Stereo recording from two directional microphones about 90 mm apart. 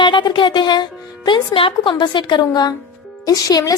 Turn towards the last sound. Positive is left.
turn(degrees=40)  # may be behind; listen again after turning